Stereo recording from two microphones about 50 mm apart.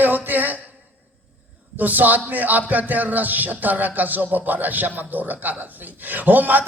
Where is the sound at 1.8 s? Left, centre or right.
Right.